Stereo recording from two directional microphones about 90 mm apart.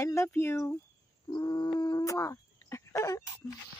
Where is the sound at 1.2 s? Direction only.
50° left (ahead or behind).